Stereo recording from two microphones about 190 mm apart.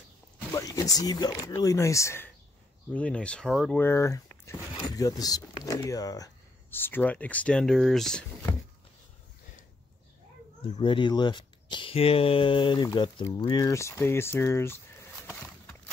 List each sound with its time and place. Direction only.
0.5 s speech: 15° left (ahead or behind); by 3.8 s centre (ahead or behind)
3.8 s speech: 15° left (ahead or behind)
10.6 s speech: 25° left (ahead or behind)
15.3 s clip-clop: 5° left (ahead or behind)